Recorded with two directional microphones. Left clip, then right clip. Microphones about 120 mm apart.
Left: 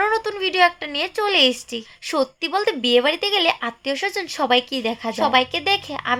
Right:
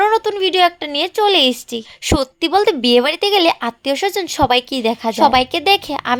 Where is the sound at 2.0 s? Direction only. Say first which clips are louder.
Right 4 dB; 65° right (ahead or behind).